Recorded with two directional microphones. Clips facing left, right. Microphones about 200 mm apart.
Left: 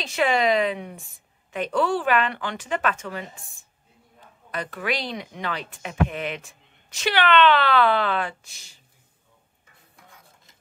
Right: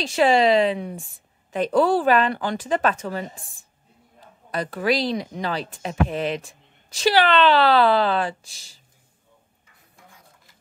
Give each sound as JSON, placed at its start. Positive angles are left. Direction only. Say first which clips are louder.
{"t": 0.0, "sound": "speech", "louder": "right 4 dB", "side_deg": -30}